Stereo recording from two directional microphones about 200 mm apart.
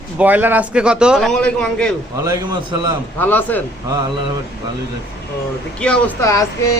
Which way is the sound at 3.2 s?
10° left (ahead or behind).